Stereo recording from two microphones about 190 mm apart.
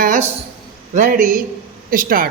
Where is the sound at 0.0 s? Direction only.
45° right (ahead or behind).